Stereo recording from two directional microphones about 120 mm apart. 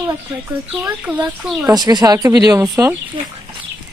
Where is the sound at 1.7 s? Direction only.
35° right (ahead or behind).